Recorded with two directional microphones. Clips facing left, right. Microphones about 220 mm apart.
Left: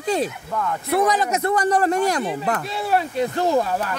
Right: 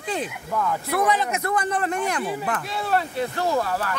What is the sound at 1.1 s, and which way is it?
Speech, 40° left (ahead or behind).